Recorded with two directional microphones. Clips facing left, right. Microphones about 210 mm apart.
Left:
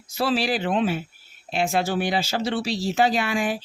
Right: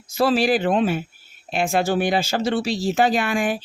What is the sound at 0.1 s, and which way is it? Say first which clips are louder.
Speech: right 5 dB; 45° right (ahead or behind).